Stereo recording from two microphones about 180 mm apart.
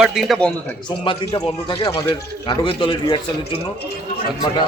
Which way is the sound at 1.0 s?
25° left (ahead or behind).